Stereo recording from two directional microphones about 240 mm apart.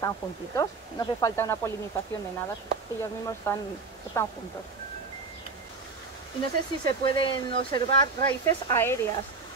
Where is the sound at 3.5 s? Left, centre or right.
Centre.